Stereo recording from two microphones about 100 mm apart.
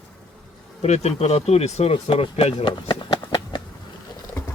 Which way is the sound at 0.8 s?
90° left.